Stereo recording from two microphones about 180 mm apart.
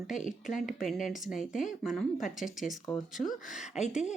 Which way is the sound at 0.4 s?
Centre (ahead or behind).